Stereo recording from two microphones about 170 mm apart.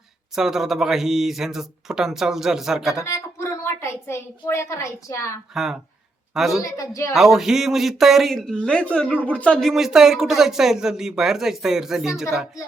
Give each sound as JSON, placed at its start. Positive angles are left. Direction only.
{"t": 0.3, "sound": "speech", "side_deg": 0}
{"t": 2.9, "sound": "a woman's voice", "side_deg": 15}
{"t": 5.5, "sound": "a woman's voice", "side_deg": 0}
{"t": 6.6, "sound": "a woman's voice", "side_deg": 20}
{"t": 7.1, "sound": "speech", "side_deg": 0}